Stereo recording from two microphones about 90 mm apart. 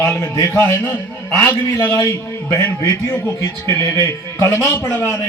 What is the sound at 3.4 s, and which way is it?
Speech, 35° left (ahead or behind).